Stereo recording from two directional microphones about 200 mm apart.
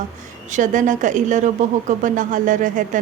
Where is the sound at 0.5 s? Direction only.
40° right (ahead or behind).